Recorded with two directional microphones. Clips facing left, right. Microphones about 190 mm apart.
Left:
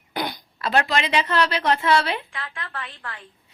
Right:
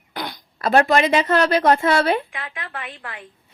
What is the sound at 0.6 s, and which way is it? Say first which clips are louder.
A woman's voice: right 6 dB; 50° right (ahead or behind).